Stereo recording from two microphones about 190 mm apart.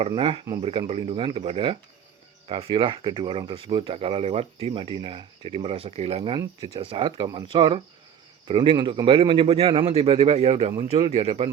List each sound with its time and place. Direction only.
0.0 s speech: 25° right (ahead or behind)